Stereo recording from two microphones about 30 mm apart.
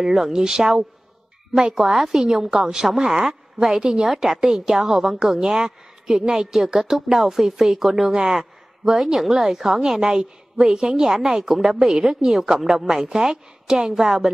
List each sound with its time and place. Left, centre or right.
0.1 s a woman's voice: centre
0.4 s a woman's voice: centre
1.9 s a woman's voice: centre
2.9 s a woman's voice: centre
3.6 s a woman's voice: right
4.0 s a woman's voice: centre
4.4 s a woman's voice: right
4.6 s a woman's voice: centre
8.1 s a woman's voice: right
10.6 s a woman's voice: right